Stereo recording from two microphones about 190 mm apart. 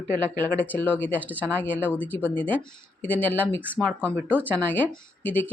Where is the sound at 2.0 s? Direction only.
10° left (ahead or behind).